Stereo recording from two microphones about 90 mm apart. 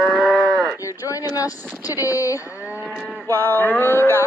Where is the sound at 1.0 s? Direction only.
40° left (ahead or behind).